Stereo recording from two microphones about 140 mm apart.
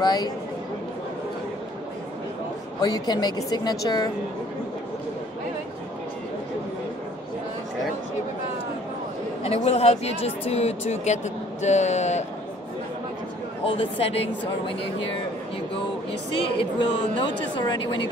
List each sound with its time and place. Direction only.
0.0 s a woman's voice: 30° left (ahead or behind)
2.8 s a woman's voice: 30° left (ahead or behind)
9.4 s speech: 45° left (ahead or behind)
13.7 s speech: 40° left (ahead or behind)
16.3 s speech: 35° left (ahead or behind)